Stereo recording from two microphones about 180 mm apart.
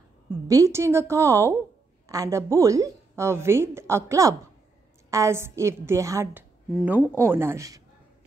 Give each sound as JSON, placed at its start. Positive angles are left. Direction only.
{"t": 0.5, "sound": "a woman's voice", "side_deg": -15}